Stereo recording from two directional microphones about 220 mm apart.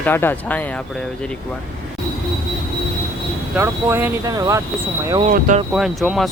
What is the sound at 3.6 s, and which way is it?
Speech, 10° right (ahead or behind).